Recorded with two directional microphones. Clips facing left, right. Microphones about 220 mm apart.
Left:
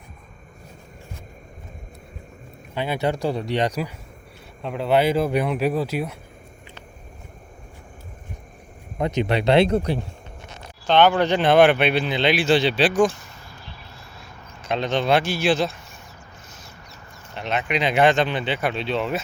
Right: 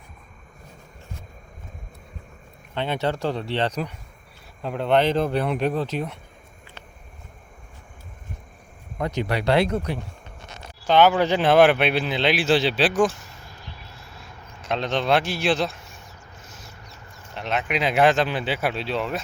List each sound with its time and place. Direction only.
2.7 s speech: 10° left (ahead or behind)
9.0 s speech: 20° left (ahead or behind)
10.8 s speech: 5° right (ahead or behind)
14.6 s speech: centre (ahead or behind)
17.3 s speech: centre (ahead or behind)